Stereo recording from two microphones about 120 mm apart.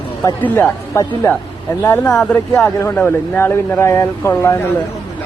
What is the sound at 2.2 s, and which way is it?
Speech, 10° left (ahead or behind).